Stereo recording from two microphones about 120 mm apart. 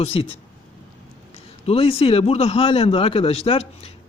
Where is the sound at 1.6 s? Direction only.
55° left (ahead or behind).